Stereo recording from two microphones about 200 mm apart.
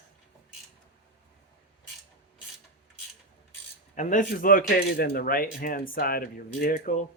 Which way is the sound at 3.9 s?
40° left (ahead or behind).